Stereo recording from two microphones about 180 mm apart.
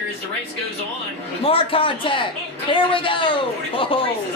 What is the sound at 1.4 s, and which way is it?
A woman's voice, 30° left (ahead or behind).